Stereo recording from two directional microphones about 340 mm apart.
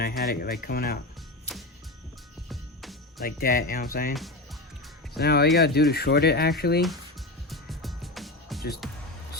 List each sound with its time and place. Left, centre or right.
0.0 s speech: left
2.5 s music: centre
3.2 s speech: left
5.1 s speech: left
7.5 s music: centre